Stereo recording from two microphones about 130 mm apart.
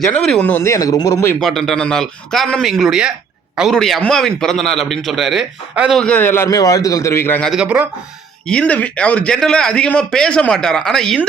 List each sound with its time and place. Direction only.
0.3 s a man's voice: 10° left (ahead or behind)
1.4 s a man's voice: centre (ahead or behind)
6.0 s a man's voice: 10° left (ahead or behind)
7.4 s speech: 5° right (ahead or behind)
8.4 s a man's voice: 10° left (ahead or behind)